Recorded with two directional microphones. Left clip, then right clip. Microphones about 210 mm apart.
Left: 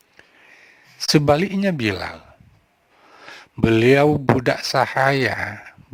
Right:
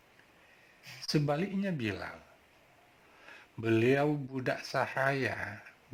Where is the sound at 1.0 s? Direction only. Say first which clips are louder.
Left 16 dB; 35° left (ahead or behind).